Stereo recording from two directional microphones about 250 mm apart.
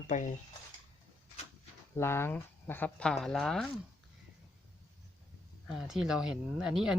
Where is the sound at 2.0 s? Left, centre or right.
Centre.